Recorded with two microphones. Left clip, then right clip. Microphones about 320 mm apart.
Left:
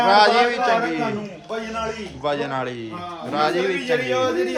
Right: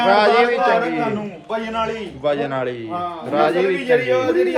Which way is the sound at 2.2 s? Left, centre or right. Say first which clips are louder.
Right 3 dB; centre.